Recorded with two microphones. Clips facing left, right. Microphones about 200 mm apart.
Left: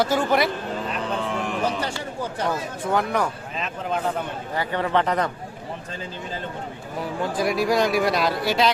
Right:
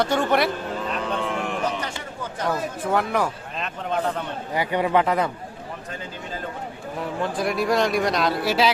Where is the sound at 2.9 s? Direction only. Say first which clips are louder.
Even; centre (ahead or behind).